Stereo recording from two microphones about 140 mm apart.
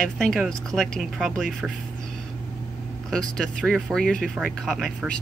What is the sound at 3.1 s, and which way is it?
Speech, 5° left (ahead or behind).